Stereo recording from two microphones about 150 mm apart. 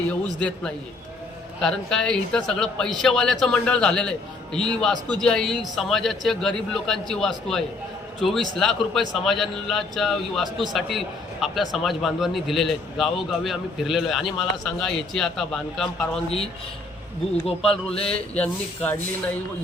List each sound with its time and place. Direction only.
0.3 s a man's voice: 10° left (ahead or behind)
17.4 s a man's voice: 40° left (ahead or behind)
18.3 s speech: 10° left (ahead or behind)